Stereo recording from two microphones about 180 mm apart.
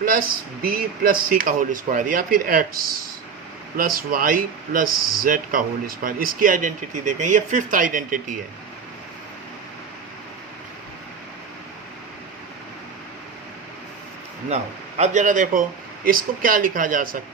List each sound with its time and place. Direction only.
0.0 s speech: 50° right (ahead or behind)
14.5 s speech: 40° right (ahead or behind)